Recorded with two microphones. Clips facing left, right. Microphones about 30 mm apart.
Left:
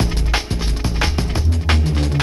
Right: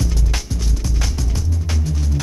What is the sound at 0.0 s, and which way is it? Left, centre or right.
Music, left.